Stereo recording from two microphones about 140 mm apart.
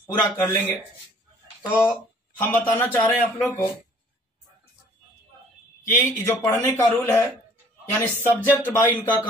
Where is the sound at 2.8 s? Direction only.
15° left (ahead or behind).